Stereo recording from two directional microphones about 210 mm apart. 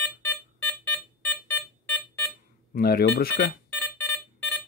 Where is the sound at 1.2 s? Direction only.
5° left (ahead or behind).